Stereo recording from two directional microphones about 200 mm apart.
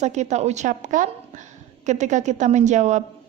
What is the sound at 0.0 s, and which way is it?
A woman's voice, 35° right (ahead or behind).